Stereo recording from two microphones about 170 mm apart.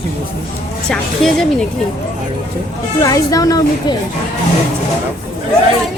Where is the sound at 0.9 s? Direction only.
5° left (ahead or behind).